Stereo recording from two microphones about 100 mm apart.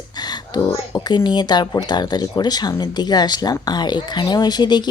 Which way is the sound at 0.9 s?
45° left (ahead or behind).